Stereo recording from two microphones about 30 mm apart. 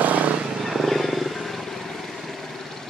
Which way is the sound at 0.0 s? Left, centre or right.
Right.